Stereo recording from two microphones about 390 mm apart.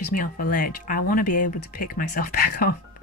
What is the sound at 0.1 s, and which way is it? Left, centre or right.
Speech, left.